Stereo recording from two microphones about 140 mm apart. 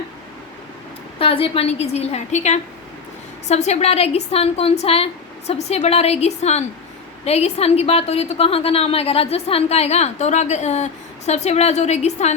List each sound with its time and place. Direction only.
1.2 s a woman's voice: 40° left (ahead or behind)